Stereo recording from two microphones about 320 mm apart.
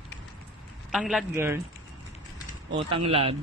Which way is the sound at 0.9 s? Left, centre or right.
Centre.